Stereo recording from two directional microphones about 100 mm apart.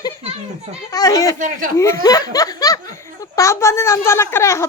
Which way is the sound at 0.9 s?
40° left (ahead or behind).